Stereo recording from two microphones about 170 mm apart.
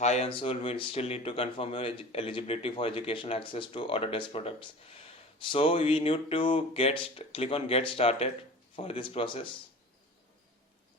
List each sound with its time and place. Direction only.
0.0 s speech: 40° left (ahead or behind)